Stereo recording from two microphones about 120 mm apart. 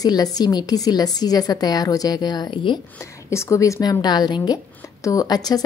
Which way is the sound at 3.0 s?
25° left (ahead or behind).